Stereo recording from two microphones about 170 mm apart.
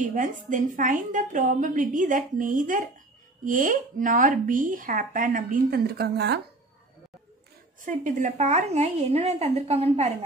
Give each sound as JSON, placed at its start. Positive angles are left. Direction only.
{"t": 0.0, "sound": "speech", "side_deg": -50}
{"t": 7.8, "sound": "a woman's voice", "side_deg": -50}